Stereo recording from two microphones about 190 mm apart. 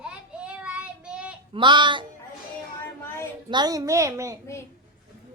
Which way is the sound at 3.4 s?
20° right (ahead or behind).